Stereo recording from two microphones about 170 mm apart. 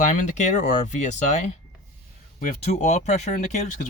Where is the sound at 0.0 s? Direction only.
45° left (ahead or behind).